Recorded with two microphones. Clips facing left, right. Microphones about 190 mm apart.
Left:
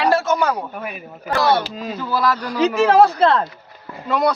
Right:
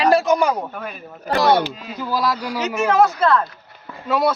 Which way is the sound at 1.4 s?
15° right (ahead or behind).